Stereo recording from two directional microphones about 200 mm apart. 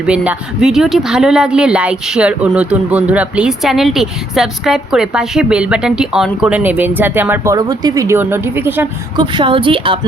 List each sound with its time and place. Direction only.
0.0 s speech: 5° right (ahead or behind)
9.1 s a woman's voice: 25° right (ahead or behind)